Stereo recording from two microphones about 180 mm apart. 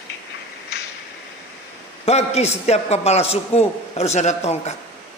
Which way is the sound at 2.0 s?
35° left (ahead or behind).